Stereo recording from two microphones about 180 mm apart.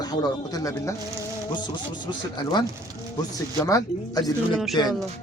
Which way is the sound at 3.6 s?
20° left (ahead or behind).